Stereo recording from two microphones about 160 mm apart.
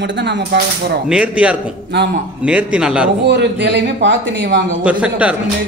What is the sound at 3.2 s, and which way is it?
Speech, 90° right.